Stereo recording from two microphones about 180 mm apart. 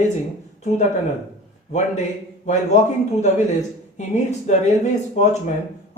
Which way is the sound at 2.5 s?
40° left (ahead or behind).